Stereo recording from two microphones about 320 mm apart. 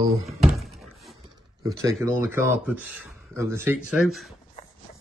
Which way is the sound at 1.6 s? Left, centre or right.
Centre.